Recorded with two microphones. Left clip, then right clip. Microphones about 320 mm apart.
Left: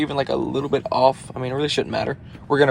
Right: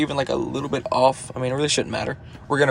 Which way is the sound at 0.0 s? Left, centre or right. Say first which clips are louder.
Left 1 dB; centre.